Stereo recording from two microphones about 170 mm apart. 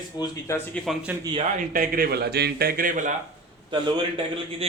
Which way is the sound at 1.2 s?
25° right (ahead or behind).